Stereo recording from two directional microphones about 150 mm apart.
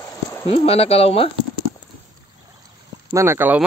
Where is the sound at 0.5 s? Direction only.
40° left (ahead or behind).